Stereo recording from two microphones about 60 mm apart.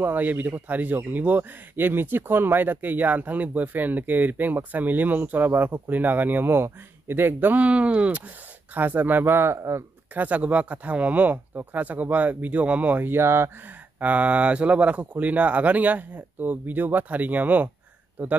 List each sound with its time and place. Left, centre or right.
0.0 s speech: right
9.6 s speech: right
10.1 s speech: right
13.9 s speech: right